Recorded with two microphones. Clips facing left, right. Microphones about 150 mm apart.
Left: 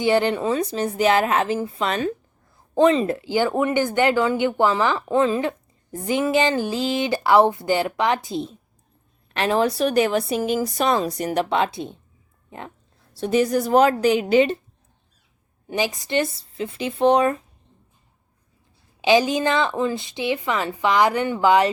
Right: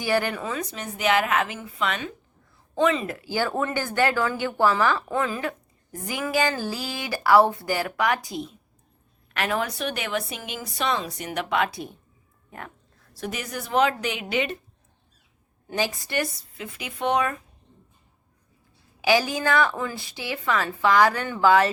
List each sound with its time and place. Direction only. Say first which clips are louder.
0.0 s a woman's voice: left 6 dB; 25° left (ahead or behind)
15.6 s speech: left 3 dB; 20° left (ahead or behind)
19.0 s speech: left 4 dB; 20° left (ahead or behind)